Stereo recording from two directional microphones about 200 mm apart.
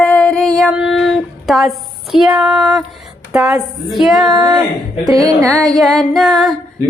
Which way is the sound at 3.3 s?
10° right (ahead or behind).